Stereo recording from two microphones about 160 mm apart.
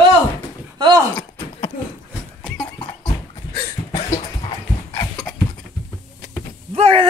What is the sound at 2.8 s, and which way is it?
Horse, 30° left (ahead or behind).